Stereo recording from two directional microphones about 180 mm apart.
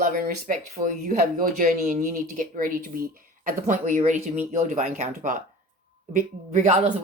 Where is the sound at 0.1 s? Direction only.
50° right (ahead or behind).